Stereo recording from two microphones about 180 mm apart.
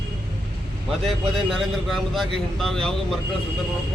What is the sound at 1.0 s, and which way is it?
A man's voice, centre (ahead or behind).